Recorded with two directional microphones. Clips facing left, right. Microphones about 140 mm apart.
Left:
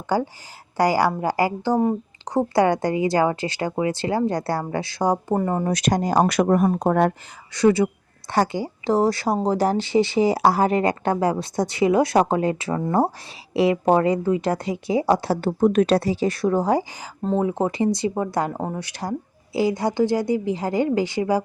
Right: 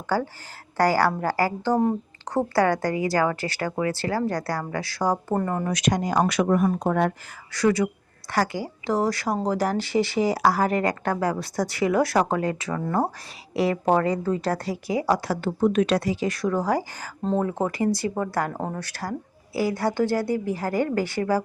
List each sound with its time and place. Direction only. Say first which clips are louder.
0.1 s speech: left 3 dB; 20° left (ahead or behind)
5.6 s speech: left 3 dB; 35° left (ahead or behind)
7.5 s speech: left 4 dB; 25° left (ahead or behind)
15.6 s speech: left 3 dB; 45° left (ahead or behind); by 21.4 s 15° left (ahead or behind)